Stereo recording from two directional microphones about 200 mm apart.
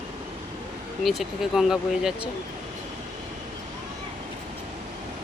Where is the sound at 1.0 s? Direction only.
Centre (ahead or behind).